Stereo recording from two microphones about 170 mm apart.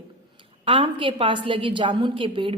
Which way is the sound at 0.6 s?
30° right (ahead or behind).